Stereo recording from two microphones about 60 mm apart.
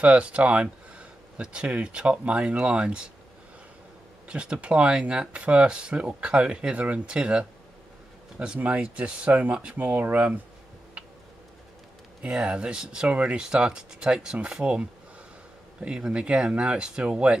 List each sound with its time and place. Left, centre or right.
0.0 s speech: centre
4.3 s speech: centre
8.5 s speech: right
9.8 s speech: right
12.2 s speech: centre